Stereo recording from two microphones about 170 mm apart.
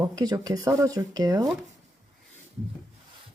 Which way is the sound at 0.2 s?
20° right (ahead or behind).